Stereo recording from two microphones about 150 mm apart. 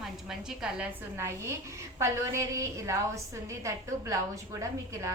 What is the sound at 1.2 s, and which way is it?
A woman's voice, 15° right (ahead or behind).